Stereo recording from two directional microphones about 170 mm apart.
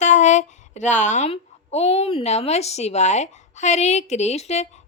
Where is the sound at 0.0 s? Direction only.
45° left (ahead or behind).